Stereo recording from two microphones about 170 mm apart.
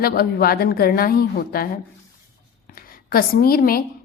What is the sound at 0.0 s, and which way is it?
A woman's voice, 65° left (ahead or behind).